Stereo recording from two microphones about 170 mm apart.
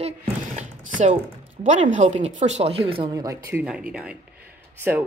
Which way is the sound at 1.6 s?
45° right (ahead or behind).